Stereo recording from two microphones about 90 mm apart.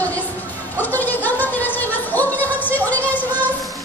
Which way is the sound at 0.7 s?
20° left (ahead or behind).